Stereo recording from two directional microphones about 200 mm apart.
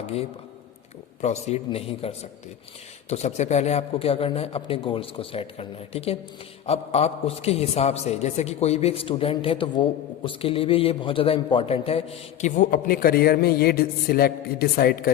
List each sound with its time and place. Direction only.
0.0 s a man's voice: 30° left (ahead or behind); by 15.1 s 50° left (ahead or behind)